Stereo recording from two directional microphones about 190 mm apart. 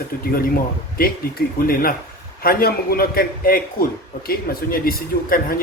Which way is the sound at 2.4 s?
50° left (ahead or behind).